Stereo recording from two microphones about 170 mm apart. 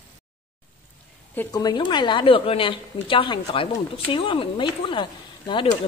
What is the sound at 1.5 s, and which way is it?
A woman's voice, 20° left (ahead or behind).